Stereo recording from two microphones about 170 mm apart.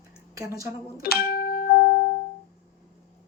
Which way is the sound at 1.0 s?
65° left (ahead or behind).